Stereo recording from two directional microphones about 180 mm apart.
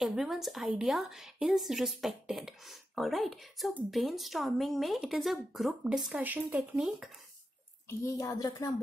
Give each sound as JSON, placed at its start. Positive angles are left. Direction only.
{"t": 0.0, "sound": "a woman's voice", "side_deg": -5}
{"t": 8.0, "sound": "speech", "side_deg": 20}